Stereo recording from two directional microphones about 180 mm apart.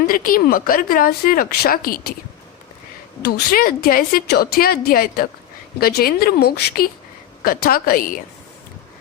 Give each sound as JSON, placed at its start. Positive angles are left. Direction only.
{"t": 0.1, "sound": "speech", "side_deg": 50}
{"t": 3.2, "sound": "a woman's voice", "side_deg": 55}